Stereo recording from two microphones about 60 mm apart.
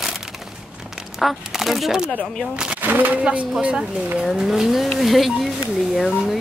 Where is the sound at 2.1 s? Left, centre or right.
Centre.